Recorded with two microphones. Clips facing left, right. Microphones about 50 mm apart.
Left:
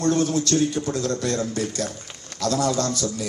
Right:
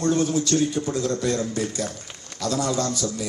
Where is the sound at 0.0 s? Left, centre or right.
Centre.